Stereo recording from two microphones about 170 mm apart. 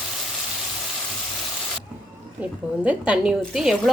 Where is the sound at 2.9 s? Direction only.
5° right (ahead or behind).